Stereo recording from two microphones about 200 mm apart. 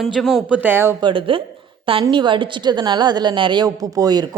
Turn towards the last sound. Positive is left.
turn(degrees=-20)  # may be behind; listen again after turning